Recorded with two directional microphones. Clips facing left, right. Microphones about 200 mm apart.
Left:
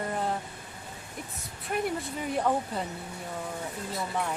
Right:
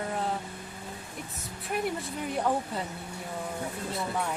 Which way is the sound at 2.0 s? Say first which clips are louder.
Left 1 dB; centre (ahead or behind).